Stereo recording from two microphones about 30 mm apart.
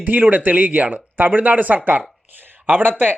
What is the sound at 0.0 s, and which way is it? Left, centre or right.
Speech, right.